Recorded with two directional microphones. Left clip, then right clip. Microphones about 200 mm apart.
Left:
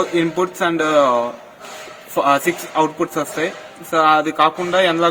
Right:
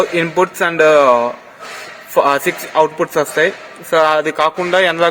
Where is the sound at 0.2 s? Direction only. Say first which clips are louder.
Right 4 dB; 40° right (ahead or behind).